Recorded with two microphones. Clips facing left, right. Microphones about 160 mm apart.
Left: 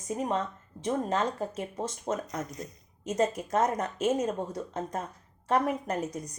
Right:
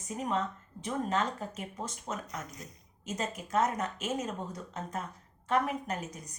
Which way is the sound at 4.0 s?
30° left (ahead or behind).